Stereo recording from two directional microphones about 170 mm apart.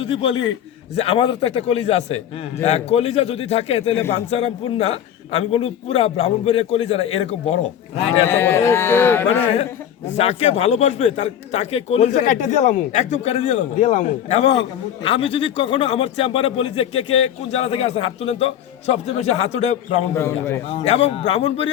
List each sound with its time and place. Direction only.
0.0 s a man's voice: 35° left (ahead or behind)
8.3 s speech: 15° left (ahead or behind)
10.2 s a man's voice: 40° left (ahead or behind)
20.1 s speech: 15° left (ahead or behind)
20.7 s a man's voice: 35° left (ahead or behind)